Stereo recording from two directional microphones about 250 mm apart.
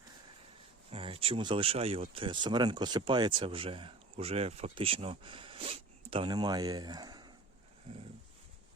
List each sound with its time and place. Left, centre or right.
0.9 s speech: right